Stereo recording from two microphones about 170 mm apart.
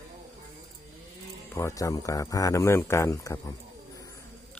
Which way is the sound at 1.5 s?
20° left (ahead or behind).